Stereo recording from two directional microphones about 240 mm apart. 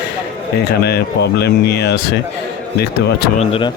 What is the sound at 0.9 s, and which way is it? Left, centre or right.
Speech, left.